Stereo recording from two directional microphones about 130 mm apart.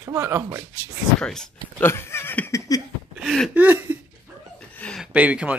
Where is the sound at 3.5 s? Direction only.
15° right (ahead or behind).